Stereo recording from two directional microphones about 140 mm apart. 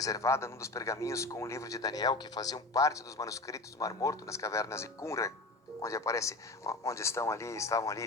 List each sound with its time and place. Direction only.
0.0 s a man's voice: 25° left (ahead or behind)